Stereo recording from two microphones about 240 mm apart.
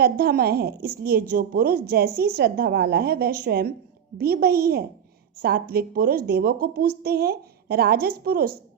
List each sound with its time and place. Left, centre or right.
0.0 s a woman's voice: right